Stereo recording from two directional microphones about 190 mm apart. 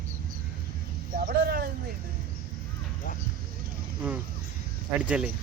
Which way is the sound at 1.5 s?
55° right (ahead or behind).